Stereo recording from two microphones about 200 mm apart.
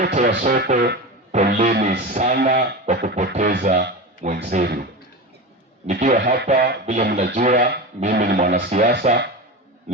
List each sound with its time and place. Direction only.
0.0 s speech: 45° right (ahead or behind)
1.7 s music: 50° right (ahead or behind)
6.8 s speech: 40° right (ahead or behind)
7.1 s music: 50° right (ahead or behind)